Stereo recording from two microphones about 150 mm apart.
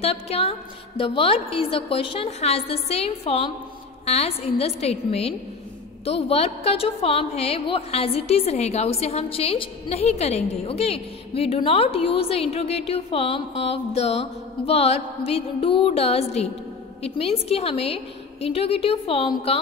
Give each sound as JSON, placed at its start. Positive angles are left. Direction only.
{"t": 0.0, "sound": "a woman's voice", "side_deg": 40}